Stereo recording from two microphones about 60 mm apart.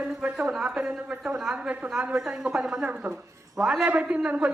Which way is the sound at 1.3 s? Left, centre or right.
Centre.